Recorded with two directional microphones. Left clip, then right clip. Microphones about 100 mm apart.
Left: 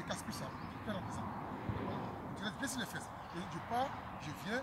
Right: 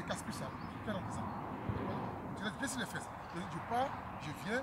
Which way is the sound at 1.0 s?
40° left (ahead or behind).